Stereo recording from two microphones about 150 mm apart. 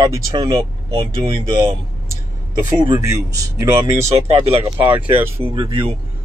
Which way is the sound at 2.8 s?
25° right (ahead or behind).